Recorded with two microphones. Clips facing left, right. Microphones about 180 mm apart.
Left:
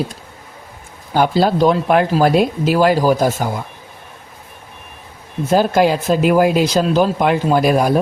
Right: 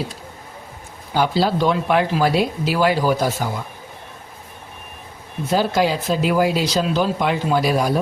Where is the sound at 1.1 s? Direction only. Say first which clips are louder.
Left 4 dB; 50° left (ahead or behind).